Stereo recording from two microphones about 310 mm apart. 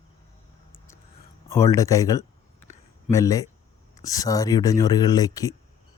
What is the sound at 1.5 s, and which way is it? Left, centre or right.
Speech, centre.